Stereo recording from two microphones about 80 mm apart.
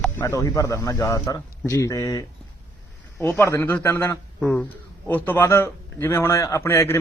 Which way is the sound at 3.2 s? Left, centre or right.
Left.